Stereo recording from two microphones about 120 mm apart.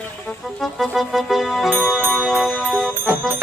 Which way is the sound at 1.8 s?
10° right (ahead or behind).